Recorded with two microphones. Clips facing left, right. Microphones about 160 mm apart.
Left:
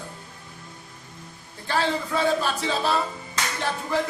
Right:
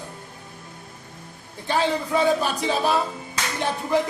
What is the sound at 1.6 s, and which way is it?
A man's voice, 15° right (ahead or behind).